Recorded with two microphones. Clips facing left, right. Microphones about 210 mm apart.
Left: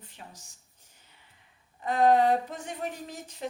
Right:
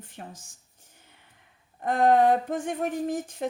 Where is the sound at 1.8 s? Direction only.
55° right (ahead or behind).